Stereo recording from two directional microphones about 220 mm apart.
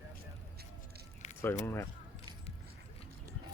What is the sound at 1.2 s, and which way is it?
Squish, 30° left (ahead or behind).